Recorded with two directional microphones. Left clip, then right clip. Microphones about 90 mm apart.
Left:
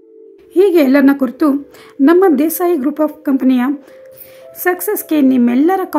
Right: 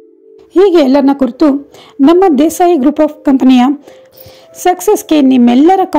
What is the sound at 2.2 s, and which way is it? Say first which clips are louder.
Speech: right 4 dB; 35° right (ahead or behind).